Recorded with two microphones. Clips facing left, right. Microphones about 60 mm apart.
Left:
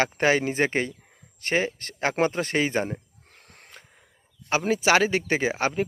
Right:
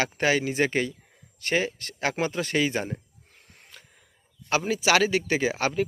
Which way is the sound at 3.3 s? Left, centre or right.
Left.